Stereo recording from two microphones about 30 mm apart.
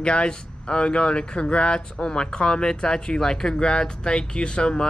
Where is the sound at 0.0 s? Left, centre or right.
Left.